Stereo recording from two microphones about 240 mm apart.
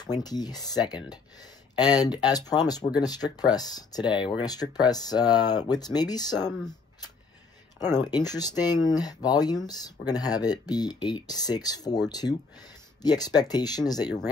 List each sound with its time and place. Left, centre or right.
0.0 s speech: centre
7.8 s speech: centre